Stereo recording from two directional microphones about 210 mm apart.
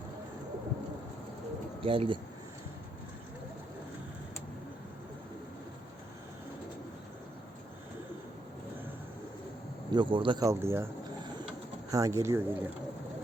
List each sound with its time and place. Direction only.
1.8 s speech: 25° right (ahead or behind)
9.9 s speech: 20° right (ahead or behind)